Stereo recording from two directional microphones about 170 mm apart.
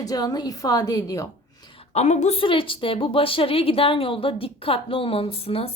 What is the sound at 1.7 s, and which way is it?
A woman's voice, 40° left (ahead or behind).